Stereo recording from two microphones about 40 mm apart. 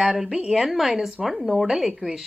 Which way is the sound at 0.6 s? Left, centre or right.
Centre.